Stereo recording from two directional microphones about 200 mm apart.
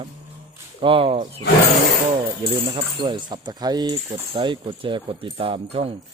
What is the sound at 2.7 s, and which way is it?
Speech, 25° right (ahead or behind).